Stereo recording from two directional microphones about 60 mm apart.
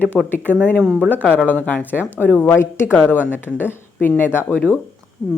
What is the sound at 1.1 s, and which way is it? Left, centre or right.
A woman's voice, left.